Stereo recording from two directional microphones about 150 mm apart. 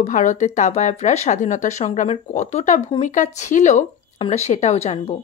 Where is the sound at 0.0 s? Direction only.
55° left (ahead or behind).